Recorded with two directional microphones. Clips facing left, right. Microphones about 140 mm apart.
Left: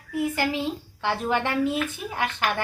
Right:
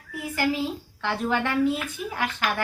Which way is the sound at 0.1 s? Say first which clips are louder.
Left 5 dB; 20° left (ahead or behind).